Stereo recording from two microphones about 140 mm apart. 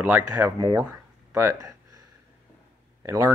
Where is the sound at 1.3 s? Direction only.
25° right (ahead or behind).